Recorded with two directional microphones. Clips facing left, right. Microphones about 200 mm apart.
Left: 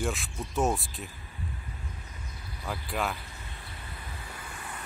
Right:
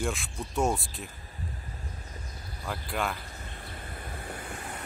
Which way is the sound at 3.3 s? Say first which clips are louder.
Right 3 dB; 45° right (ahead or behind).